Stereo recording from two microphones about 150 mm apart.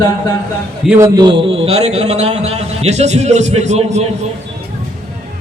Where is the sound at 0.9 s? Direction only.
20° right (ahead or behind); by 4.0 s 50° right (ahead or behind).